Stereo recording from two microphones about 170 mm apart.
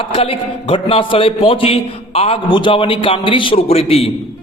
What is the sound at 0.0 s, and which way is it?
A man's voice, 35° left (ahead or behind).